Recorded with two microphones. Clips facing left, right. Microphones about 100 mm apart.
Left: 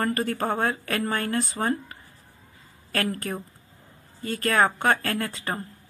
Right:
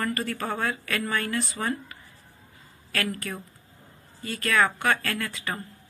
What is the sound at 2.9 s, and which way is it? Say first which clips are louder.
Speech: left 3 dB; 45° left (ahead or behind).